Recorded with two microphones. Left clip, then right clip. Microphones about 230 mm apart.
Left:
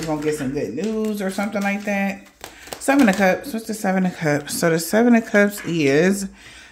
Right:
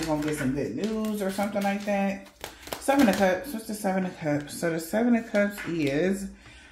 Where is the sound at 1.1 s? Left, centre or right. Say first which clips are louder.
Left 4 dB; left.